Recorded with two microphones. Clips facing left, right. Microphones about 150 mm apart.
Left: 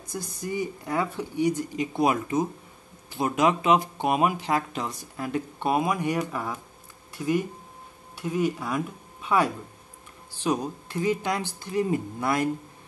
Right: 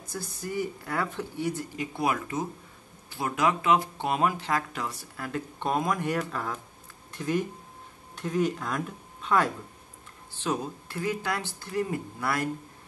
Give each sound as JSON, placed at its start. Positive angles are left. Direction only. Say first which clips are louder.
{"t": 0.0, "sound": "speech", "louder": "left 3 dB", "side_deg": 15}